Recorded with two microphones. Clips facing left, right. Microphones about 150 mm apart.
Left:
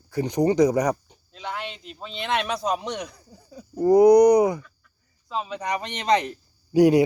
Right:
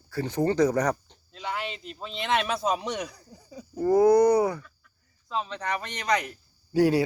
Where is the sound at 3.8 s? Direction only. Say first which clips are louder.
Left 5 dB; 20° left (ahead or behind).